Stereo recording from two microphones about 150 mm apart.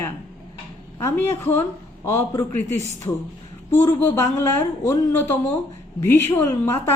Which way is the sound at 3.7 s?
15° left (ahead or behind).